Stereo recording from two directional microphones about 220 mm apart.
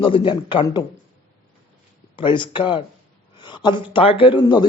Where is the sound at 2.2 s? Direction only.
20° left (ahead or behind).